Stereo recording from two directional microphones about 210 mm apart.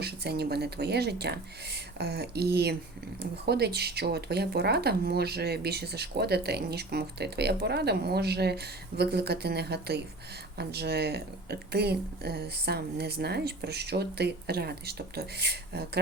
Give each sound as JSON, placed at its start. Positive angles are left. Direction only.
{"t": 0.0, "sound": "speech", "side_deg": -50}